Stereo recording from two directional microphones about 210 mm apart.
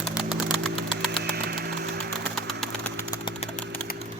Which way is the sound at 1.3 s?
50° right (ahead or behind).